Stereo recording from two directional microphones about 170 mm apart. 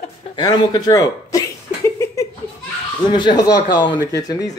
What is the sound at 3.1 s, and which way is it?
Speech, 25° left (ahead or behind).